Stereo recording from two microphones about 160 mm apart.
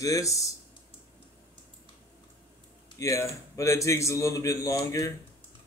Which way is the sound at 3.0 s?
20° left (ahead or behind).